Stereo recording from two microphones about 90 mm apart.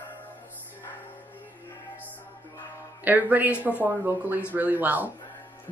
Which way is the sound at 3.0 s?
20° right (ahead or behind).